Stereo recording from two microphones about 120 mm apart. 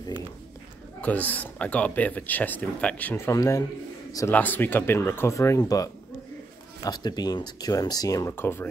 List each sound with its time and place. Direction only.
1.0 s speech: 15° left (ahead or behind)
4.3 s speech: 15° left (ahead or behind); by 8.4 s 30° left (ahead or behind)
8.4 s speech: 20° left (ahead or behind)